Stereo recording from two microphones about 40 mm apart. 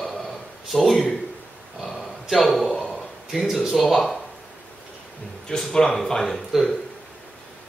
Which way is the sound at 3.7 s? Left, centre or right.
Centre.